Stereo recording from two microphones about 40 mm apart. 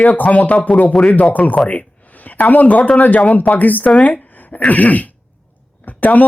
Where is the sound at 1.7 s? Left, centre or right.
Left.